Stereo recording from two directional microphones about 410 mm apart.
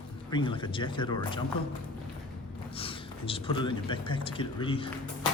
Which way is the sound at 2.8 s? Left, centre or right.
Centre.